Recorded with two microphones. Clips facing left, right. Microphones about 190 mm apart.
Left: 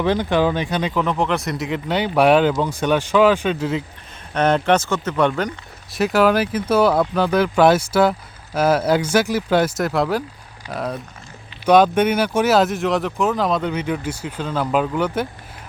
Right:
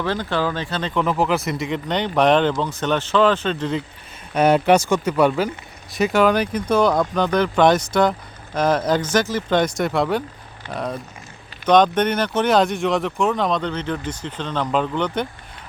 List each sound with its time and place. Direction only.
0.0 s speech: 15° left (ahead or behind)
0.9 s speech: 5° right (ahead or behind)
4.4 s speech: 10° right (ahead or behind)